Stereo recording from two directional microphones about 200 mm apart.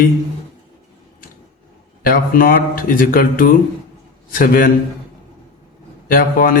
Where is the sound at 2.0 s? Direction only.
45° left (ahead or behind).